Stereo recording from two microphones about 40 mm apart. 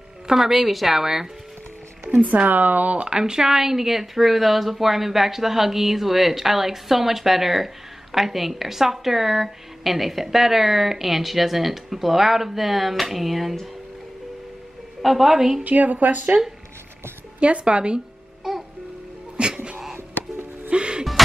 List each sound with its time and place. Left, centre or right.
0.3 s speech: centre
2.0 s speech: right
3.1 s speech: centre
15.0 s a woman's voice: centre
15.6 s speech: right
17.4 s speech: right
18.4 s music: centre
19.3 s music: right
20.7 s gasp: right